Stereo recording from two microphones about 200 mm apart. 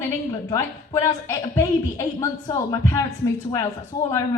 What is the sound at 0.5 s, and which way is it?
A woman's voice, 15° left (ahead or behind).